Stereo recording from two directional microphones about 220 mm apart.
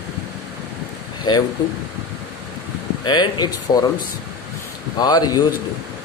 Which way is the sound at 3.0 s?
20° left (ahead or behind).